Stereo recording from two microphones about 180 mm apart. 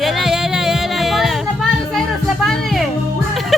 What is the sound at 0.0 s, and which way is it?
Music, centre (ahead or behind).